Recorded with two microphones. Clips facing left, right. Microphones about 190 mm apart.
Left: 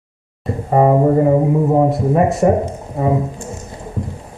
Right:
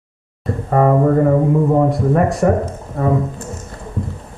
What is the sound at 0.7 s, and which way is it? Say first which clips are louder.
Music: left 1 dB; 15° left (ahead or behind).